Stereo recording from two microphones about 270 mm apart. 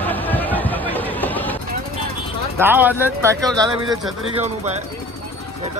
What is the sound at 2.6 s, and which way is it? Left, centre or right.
Speech, centre.